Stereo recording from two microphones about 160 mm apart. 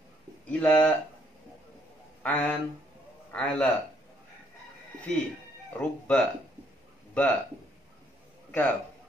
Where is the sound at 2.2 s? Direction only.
10° left (ahead or behind).